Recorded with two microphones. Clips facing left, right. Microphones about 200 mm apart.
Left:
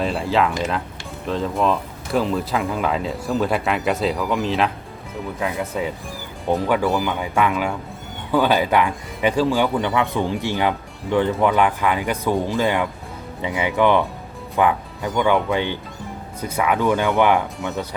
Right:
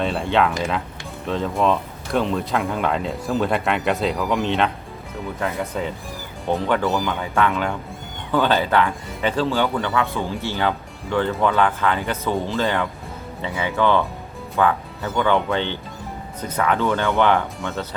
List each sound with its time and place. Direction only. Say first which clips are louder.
0.0 s speech: even; centre (ahead or behind)